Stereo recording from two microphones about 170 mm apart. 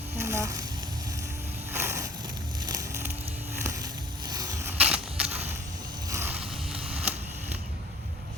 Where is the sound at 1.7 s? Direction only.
15° right (ahead or behind).